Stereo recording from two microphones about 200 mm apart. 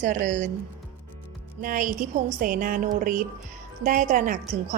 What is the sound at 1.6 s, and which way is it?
A woman's voice, 40° right (ahead or behind).